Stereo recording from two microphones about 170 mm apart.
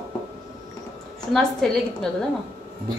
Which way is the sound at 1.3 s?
Centre (ahead or behind).